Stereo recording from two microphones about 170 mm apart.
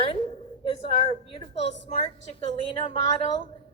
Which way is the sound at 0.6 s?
30° left (ahead or behind).